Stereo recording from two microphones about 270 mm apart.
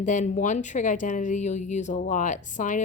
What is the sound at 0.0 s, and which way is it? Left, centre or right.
Speech, left.